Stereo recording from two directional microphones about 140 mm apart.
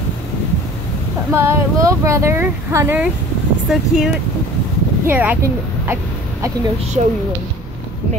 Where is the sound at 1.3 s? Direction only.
20° right (ahead or behind).